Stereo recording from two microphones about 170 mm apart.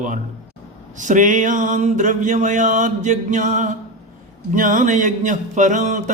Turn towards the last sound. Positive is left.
turn(degrees=-45)  # may be behind; listen again after turning